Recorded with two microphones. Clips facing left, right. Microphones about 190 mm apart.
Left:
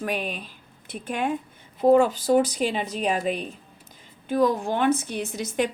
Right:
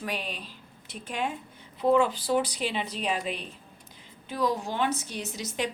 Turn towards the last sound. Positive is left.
turn(degrees=50)  # may be behind; listen again after turning